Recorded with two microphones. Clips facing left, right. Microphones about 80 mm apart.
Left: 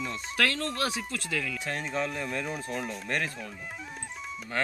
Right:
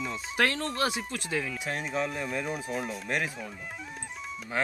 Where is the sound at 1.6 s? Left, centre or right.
Centre.